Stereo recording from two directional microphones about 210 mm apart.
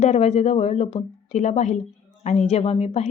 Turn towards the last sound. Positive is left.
turn(degrees=30)  # may be behind; listen again after turning